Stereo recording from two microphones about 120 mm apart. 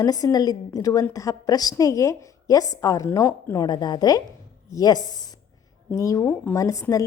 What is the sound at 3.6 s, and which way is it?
A woman's voice, 35° left (ahead or behind).